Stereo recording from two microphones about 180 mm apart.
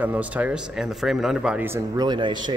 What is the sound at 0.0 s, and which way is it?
Speech, 10° right (ahead or behind).